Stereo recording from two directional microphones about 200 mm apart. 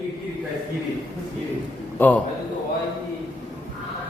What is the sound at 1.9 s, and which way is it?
Speech, 10° left (ahead or behind).